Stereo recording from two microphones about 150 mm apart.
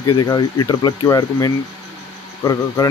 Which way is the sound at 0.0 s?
25° left (ahead or behind).